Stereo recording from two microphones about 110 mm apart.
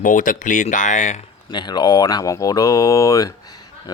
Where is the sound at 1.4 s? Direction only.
40° left (ahead or behind).